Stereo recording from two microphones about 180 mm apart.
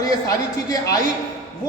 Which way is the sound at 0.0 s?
20° left (ahead or behind).